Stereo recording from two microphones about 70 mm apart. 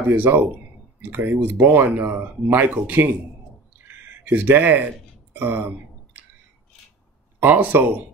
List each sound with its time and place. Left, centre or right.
0.1 s speech: right
3.8 s a sound: right
5.3 s speech: right
7.3 s speech: right